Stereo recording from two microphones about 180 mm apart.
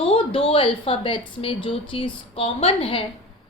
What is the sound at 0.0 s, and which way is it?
A woman's voice, 30° left (ahead or behind).